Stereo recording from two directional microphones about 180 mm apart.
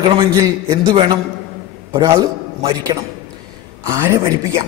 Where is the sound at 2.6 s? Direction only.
25° right (ahead or behind).